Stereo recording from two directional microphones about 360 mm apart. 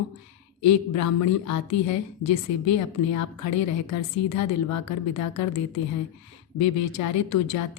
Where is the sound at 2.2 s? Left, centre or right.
Left.